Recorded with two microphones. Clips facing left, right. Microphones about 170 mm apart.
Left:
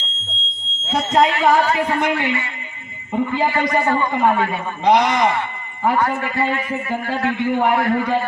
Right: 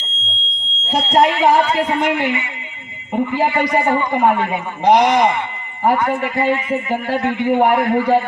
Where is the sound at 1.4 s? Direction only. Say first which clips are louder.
Right 2 dB; 20° right (ahead or behind).